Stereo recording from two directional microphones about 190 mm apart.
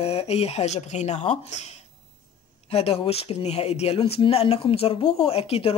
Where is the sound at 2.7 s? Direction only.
30° left (ahead or behind).